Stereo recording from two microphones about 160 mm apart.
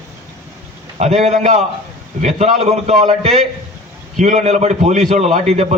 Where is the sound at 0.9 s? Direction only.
45° right (ahead or behind).